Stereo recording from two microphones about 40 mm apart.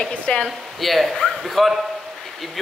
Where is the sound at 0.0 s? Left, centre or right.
Left.